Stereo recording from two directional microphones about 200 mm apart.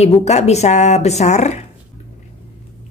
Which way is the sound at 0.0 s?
35° left (ahead or behind).